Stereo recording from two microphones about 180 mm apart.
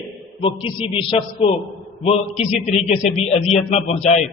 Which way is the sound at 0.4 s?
30° left (ahead or behind).